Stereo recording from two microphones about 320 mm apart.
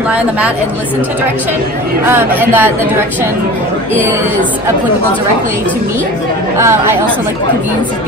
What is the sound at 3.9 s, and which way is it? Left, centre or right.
Speech, centre.